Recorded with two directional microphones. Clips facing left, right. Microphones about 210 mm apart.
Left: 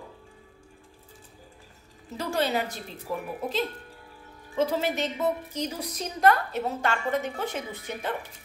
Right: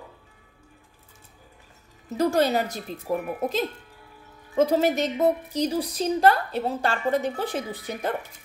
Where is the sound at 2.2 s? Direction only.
40° right (ahead or behind).